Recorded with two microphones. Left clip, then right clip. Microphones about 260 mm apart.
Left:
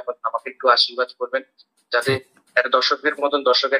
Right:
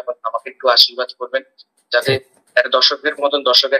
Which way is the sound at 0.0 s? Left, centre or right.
Centre.